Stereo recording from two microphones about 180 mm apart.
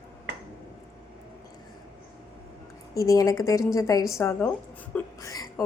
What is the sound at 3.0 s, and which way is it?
A woman's voice, 20° left (ahead or behind).